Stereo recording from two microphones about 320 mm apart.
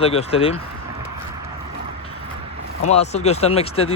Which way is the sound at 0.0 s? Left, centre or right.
Centre.